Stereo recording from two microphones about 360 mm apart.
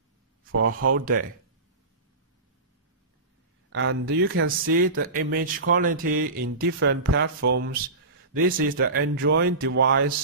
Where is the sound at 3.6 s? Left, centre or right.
Right.